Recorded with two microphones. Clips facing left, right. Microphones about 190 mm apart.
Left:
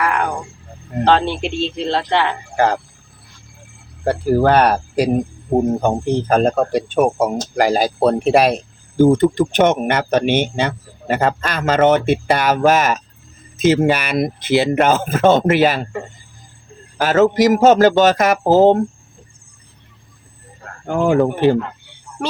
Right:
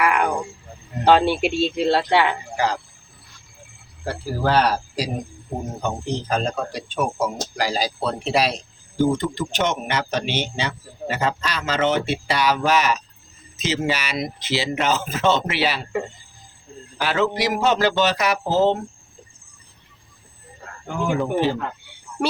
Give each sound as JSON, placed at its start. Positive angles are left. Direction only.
{"t": 1.0, "sound": "speech", "side_deg": -10}
{"t": 2.6, "sound": "speech", "side_deg": 55}
{"t": 4.0, "sound": "speech", "side_deg": 55}
{"t": 17.0, "sound": "speech", "side_deg": 45}
{"t": 20.8, "sound": "speech", "side_deg": 55}